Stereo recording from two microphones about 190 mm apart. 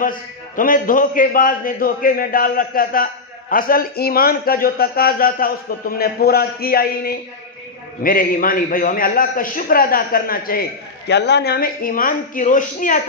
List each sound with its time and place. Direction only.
0.6 s a man's voice: 45° left (ahead or behind)